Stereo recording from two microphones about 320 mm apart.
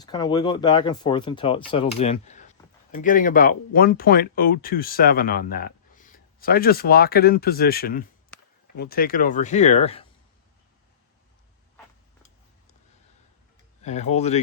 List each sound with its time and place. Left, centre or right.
0.0 s speech: centre
13.8 s speech: left